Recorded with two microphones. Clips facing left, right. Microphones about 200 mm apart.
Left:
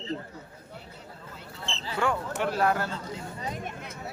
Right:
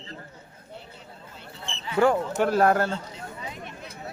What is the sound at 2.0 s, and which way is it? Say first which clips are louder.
Speech: right 7 dB; 40° right (ahead or behind).